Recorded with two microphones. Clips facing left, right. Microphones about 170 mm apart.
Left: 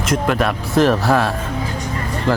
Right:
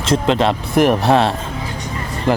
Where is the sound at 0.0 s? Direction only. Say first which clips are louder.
Right 2 dB; 25° right (ahead or behind).